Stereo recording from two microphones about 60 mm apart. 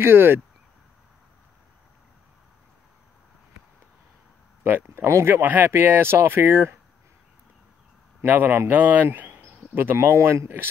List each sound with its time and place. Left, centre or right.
0.0 s speech: right
4.6 s speech: right
5.3 s speech: right
8.2 s speech: right